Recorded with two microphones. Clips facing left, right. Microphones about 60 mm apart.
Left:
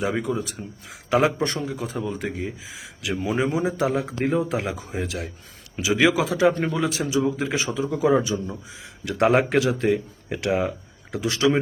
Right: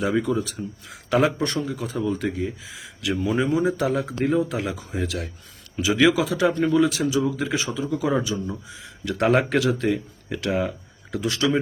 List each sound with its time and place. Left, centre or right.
0.0 s a man's voice: left
1.4 s a man's voice: left